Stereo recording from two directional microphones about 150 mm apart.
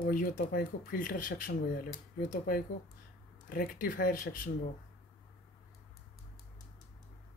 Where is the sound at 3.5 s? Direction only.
75° left (ahead or behind).